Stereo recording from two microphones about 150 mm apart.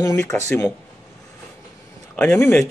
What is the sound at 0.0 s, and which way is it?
Speech, 20° left (ahead or behind).